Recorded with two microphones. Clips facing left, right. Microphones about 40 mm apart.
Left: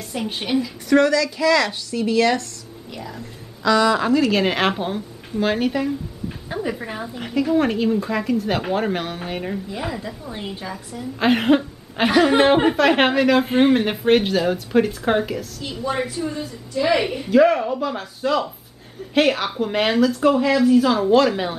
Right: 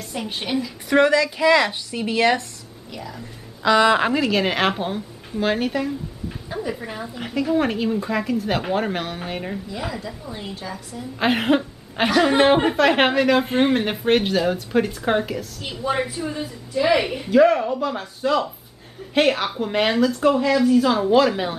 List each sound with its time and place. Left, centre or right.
0.0 s speech: centre
0.8 s speech: right
2.9 s speech: centre
3.2 s a sound: right
3.9 s a woman's voice: right
4.3 s a woman's voice: centre
7.2 s speech: centre
9.7 s a woman's voice: centre
11.1 s speech: centre
15.6 s speech: centre